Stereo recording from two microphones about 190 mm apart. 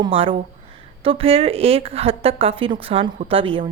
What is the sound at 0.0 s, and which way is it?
A woman's voice, 30° right (ahead or behind).